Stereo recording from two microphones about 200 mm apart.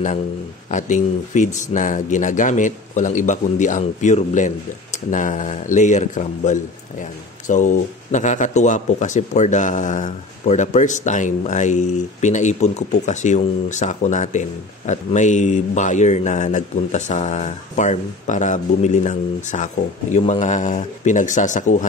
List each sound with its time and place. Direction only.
0.7 s speech: 40° left (ahead or behind)